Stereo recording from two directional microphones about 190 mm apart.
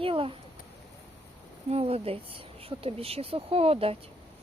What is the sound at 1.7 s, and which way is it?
Speech, 30° right (ahead or behind).